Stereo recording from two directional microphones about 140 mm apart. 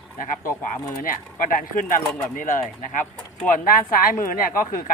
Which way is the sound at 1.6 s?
70° left (ahead or behind).